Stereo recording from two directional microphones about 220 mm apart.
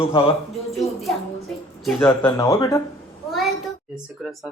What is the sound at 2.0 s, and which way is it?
Speech, 15° left (ahead or behind).